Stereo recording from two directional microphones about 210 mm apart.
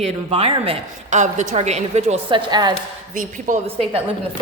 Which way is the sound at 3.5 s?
35° right (ahead or behind).